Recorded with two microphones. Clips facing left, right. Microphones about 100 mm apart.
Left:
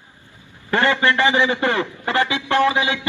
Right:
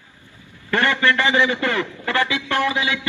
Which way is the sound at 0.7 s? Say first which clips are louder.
Left 1 dB; 20° left (ahead or behind).